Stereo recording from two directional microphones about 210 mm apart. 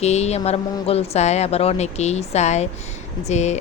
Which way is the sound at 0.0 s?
30° left (ahead or behind).